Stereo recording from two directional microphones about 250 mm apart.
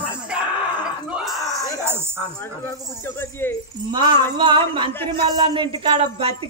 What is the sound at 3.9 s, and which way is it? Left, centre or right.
Speech, centre.